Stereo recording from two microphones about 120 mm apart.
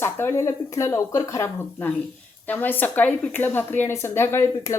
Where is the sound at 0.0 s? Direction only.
20° left (ahead or behind).